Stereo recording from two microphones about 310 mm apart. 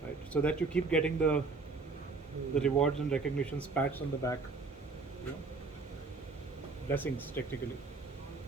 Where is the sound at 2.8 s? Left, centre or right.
Centre.